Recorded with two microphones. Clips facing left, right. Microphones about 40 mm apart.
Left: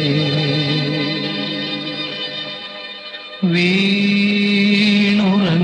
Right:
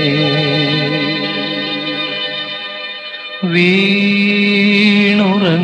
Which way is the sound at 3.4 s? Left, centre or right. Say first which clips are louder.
Right 4 dB; right.